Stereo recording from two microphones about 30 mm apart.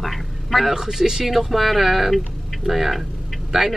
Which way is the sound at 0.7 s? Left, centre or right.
Centre.